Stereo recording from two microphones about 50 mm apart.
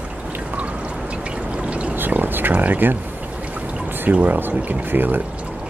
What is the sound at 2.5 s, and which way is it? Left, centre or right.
Speech, right.